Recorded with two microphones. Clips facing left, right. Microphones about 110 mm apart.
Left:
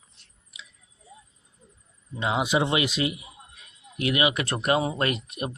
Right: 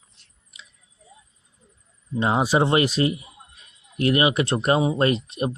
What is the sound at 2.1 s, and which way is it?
Speech, 40° right (ahead or behind).